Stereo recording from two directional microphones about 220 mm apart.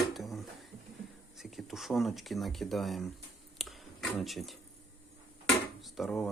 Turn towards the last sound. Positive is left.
turn(degrees=0)  # may be behind; listen again after turning